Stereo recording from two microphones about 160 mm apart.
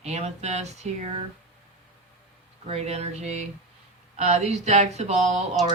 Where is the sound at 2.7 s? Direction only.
40° right (ahead or behind).